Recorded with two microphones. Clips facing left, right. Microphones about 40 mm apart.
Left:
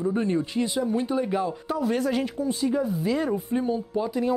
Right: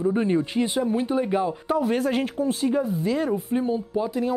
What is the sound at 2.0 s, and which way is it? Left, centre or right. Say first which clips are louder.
Speech: right 2 dB; right.